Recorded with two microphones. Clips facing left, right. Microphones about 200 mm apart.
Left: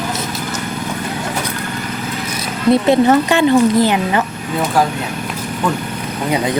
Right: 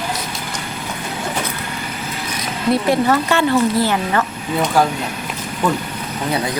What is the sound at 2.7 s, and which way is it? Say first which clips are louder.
Speech: left 5 dB; 25° left (ahead or behind).